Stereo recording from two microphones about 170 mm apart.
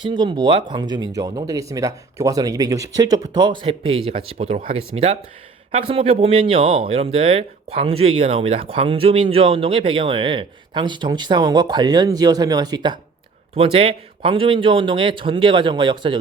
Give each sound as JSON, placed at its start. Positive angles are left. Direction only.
{"t": 0.0, "sound": "speech", "side_deg": -25}
{"t": 5.9, "sound": "speech", "side_deg": -35}